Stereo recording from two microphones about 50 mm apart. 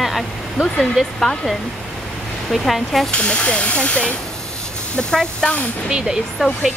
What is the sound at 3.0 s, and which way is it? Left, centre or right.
Speech, left.